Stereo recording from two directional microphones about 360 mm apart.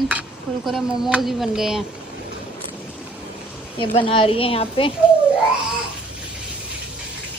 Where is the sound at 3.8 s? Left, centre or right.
Centre.